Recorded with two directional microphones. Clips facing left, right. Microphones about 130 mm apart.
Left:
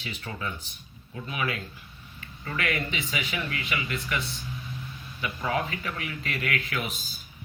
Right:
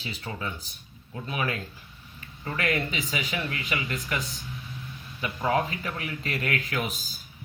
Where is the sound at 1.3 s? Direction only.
40° right (ahead or behind).